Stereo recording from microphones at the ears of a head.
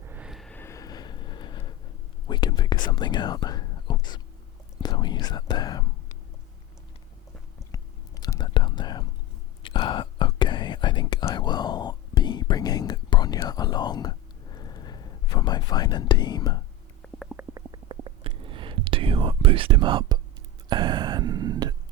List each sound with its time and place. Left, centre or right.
0.7 s a sound: left
2.2 s speech: left
4.8 s whispering: left
8.2 s whispering: left
17.4 s stomach rumble: right
20.7 s a sound: right